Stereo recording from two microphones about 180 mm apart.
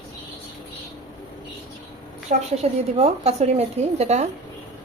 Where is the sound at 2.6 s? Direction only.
35° right (ahead or behind).